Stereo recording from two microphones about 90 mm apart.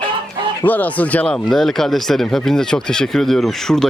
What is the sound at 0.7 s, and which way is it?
Speech, 20° left (ahead or behind).